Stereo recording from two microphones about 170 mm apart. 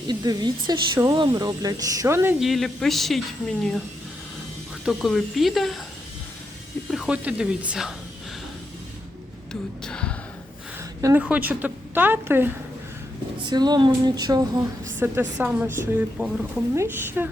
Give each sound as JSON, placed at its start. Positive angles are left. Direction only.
{"t": 0.1, "sound": "speech", "side_deg": -25}
{"t": 2.4, "sound": "speech", "side_deg": 0}
{"t": 4.9, "sound": "speech", "side_deg": 0}
{"t": 6.9, "sound": "speech", "side_deg": -5}
{"t": 9.5, "sound": "speech", "side_deg": 5}
{"t": 11.0, "sound": "a woman's voice", "side_deg": -10}
{"t": 13.4, "sound": "speech", "side_deg": -25}
{"t": 14.9, "sound": "a woman's voice", "side_deg": -10}